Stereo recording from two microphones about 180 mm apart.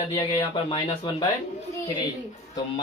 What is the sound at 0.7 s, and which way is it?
Speech, 30° left (ahead or behind).